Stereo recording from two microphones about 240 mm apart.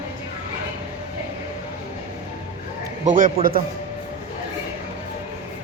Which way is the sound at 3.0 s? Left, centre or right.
Right.